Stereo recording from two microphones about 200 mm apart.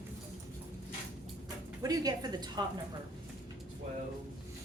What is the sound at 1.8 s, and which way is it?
Speech, 20° right (ahead or behind).